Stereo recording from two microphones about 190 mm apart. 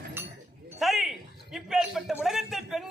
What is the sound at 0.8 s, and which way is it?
A man's voice, centre (ahead or behind).